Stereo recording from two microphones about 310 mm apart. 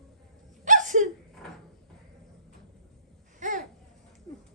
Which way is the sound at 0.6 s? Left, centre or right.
Right.